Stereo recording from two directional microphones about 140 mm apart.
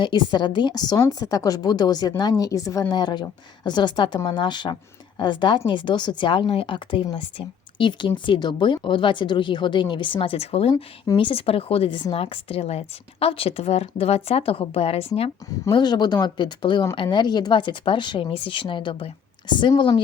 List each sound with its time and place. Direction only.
0.0 s a woman's voice: 30° left (ahead or behind)
15.7 s speech: 30° left (ahead or behind)